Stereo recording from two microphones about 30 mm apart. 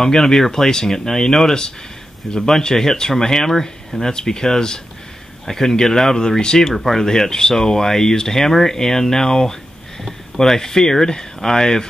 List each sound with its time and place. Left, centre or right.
0.0 s speech: centre
6.7 s speech: centre
7.0 s speech: centre